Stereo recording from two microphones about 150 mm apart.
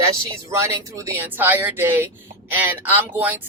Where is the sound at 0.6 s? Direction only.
20° right (ahead or behind).